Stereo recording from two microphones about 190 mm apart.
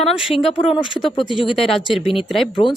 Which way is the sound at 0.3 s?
30° left (ahead or behind).